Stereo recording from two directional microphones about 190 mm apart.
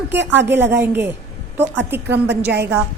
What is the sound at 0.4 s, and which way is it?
Speech, 10° right (ahead or behind).